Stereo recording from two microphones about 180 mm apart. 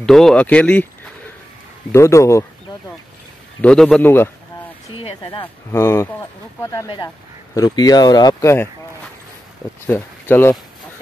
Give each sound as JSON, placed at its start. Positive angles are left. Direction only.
{"t": 0.0, "sound": "speech", "side_deg": 0}
{"t": 1.9, "sound": "speech", "side_deg": 15}
{"t": 3.6, "sound": "speech", "side_deg": 5}
{"t": 4.9, "sound": "speech", "side_deg": 30}
{"t": 5.7, "sound": "speech", "side_deg": 15}
{"t": 9.8, "sound": "speech", "side_deg": 10}